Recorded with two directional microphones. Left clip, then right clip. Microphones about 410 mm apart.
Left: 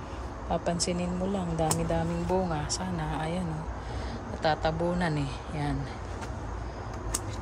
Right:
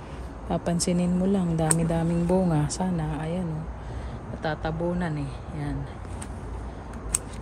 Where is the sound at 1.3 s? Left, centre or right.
Right.